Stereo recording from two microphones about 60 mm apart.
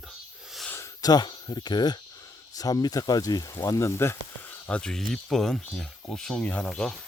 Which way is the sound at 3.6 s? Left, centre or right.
Left.